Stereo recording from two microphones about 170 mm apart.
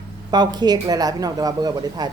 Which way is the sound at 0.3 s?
25° right (ahead or behind).